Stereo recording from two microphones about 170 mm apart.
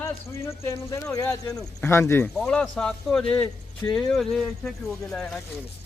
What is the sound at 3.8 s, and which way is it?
Speech, 25° left (ahead or behind).